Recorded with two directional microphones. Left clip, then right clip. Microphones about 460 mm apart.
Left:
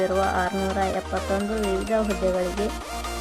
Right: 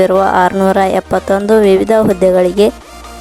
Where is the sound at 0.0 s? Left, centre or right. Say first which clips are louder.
Right 13 dB; right.